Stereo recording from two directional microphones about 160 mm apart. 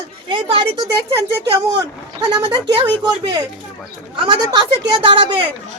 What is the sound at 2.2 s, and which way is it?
A woman's voice, 25° right (ahead or behind).